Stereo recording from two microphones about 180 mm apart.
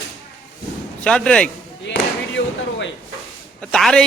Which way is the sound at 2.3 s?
90° left.